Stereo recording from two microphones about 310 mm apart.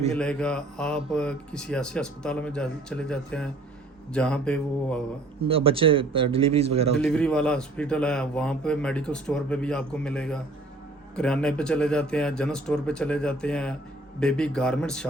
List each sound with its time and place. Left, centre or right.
0.1 s a man's voice: centre
5.5 s a man's voice: centre
6.9 s a man's voice: centre